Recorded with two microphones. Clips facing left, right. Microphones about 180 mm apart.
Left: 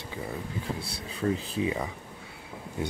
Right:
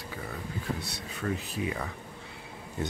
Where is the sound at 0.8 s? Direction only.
30° left (ahead or behind).